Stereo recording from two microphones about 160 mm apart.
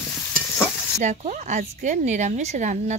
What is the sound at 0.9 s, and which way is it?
Speech, 45° right (ahead or behind).